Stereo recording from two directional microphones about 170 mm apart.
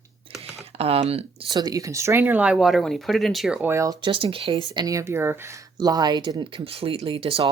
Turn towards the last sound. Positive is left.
turn(degrees=-35)  # may be behind; listen again after turning